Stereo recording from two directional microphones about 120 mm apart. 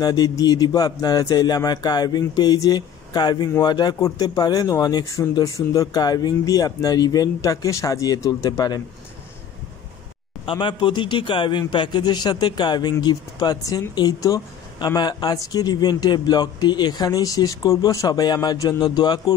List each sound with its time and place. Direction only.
0.0 s speech: 35° left (ahead or behind)
10.4 s a man's voice: 40° left (ahead or behind)